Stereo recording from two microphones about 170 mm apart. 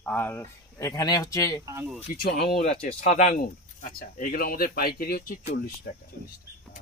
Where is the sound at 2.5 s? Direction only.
30° left (ahead or behind); by 5.9 s 60° left (ahead or behind).